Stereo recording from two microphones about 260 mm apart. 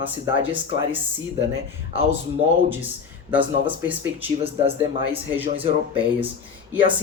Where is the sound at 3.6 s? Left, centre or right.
Centre.